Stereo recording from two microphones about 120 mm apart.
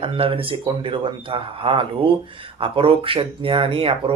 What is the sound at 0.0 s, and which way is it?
Speech, 50° right (ahead or behind).